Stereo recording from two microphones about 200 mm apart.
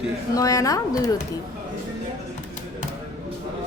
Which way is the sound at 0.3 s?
15° left (ahead or behind).